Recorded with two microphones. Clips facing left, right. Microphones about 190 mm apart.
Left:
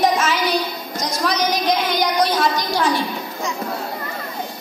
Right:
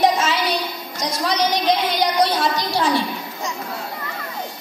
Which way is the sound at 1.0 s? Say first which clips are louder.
Even; 30° right (ahead or behind).